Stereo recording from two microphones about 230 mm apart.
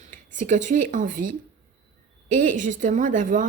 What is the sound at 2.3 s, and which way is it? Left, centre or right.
A woman's voice, right.